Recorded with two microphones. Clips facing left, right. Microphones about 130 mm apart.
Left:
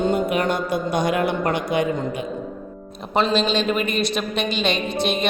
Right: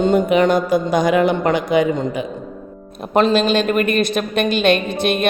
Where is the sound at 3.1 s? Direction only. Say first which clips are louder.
Right 5 dB; 50° right (ahead or behind).